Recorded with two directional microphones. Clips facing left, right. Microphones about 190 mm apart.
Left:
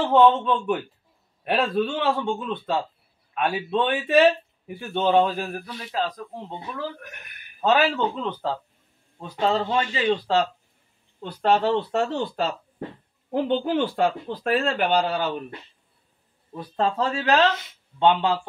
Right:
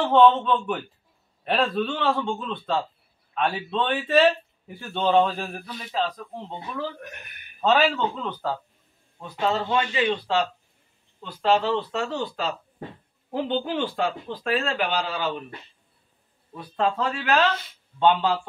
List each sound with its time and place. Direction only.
0.1 s a man's voice: 10° left (ahead or behind)
9.2 s speech: 30° left (ahead or behind)
11.2 s speech: 55° left (ahead or behind)
16.5 s speech: 35° left (ahead or behind)